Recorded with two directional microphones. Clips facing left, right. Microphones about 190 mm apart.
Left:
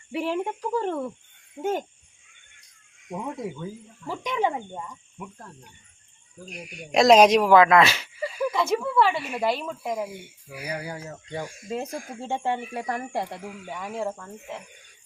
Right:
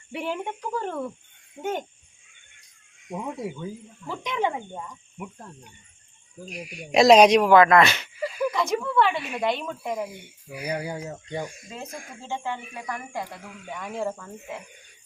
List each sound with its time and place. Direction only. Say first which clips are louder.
0.1 s speech: left 3 dB; centre (ahead or behind)
3.1 s speech: even; 5° right (ahead or behind)
4.0 s speech: left 1 dB; 10° left (ahead or behind)
5.1 s speech: right 5 dB; 15° right (ahead or behind)
6.4 s speech: right 2 dB; centre (ahead or behind)
10.9 s speech: right 2 dB; 15° right (ahead or behind)
11.9 s speech: left 5 dB; centre (ahead or behind)
12.7 s speech: left 4 dB; 30° left (ahead or behind)
13.4 s speech: left 2 dB; 5° left (ahead or behind)